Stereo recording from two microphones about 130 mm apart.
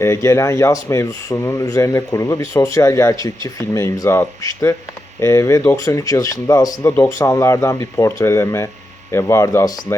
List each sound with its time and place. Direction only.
0.0 s speech: 20° left (ahead or behind)